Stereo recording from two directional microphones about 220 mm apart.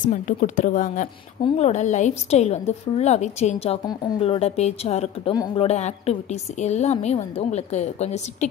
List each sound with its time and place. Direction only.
0.1 s a woman's voice: 35° left (ahead or behind)